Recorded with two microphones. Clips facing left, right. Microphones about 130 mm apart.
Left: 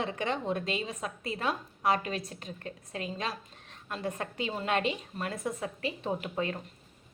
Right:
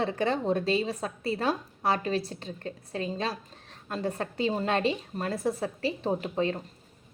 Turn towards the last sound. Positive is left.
turn(degrees=-30)  # may be behind; listen again after turning